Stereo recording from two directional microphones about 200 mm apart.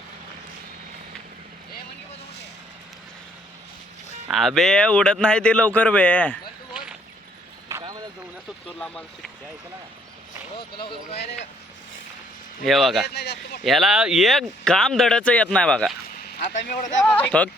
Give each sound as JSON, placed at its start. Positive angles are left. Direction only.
{"t": 4.3, "sound": "speech", "side_deg": 0}
{"t": 7.7, "sound": "vehicle", "side_deg": -20}
{"t": 8.6, "sound": "speech", "side_deg": 5}
{"t": 10.6, "sound": "speech", "side_deg": 25}
{"t": 11.2, "sound": "speech", "side_deg": 60}
{"t": 12.6, "sound": "speech", "side_deg": 0}
{"t": 13.1, "sound": "speech", "side_deg": 55}
{"t": 13.7, "sound": "speech", "side_deg": 0}
{"t": 16.4, "sound": "speech", "side_deg": 40}
{"t": 17.0, "sound": "speech", "side_deg": 5}